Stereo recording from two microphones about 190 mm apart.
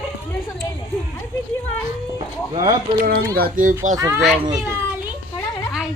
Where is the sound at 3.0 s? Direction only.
55° right (ahead or behind).